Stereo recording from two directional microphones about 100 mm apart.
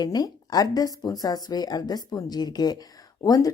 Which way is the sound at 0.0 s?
40° left (ahead or behind).